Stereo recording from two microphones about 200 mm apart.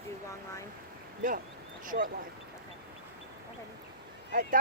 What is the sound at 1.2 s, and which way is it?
Speech, 45° right (ahead or behind).